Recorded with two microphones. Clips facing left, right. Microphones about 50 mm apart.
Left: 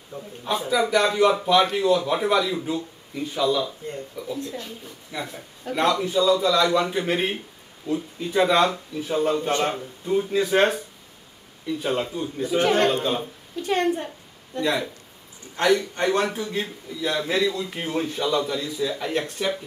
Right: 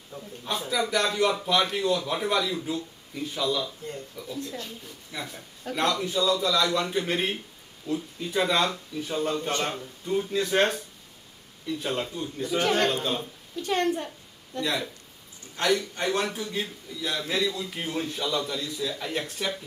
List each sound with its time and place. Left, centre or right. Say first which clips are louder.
0.1 s a woman's voice: left 5 dB; centre